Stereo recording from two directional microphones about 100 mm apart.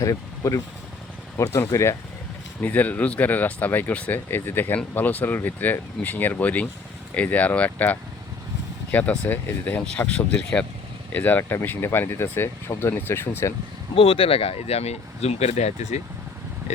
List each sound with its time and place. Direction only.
0.0 s speech: 35° left (ahead or behind)
2.6 s speech: 15° left (ahead or behind)
13.9 s speech: 65° left (ahead or behind); by 16.1 s 90° left